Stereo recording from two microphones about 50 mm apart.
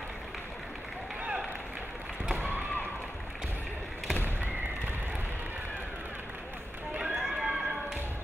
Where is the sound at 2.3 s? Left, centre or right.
Right.